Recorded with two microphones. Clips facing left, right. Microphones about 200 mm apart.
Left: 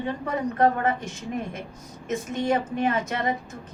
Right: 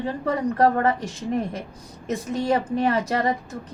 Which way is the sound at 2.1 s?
35° right (ahead or behind).